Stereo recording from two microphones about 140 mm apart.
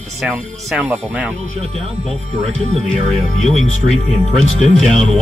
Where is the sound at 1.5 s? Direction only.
45° right (ahead or behind).